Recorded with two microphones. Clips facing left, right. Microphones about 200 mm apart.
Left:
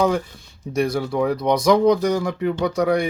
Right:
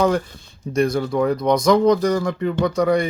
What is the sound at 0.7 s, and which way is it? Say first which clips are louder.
Speech: right 2 dB; 5° left (ahead or behind).